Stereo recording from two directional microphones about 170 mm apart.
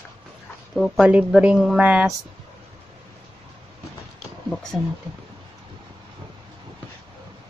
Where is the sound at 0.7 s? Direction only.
5° right (ahead or behind).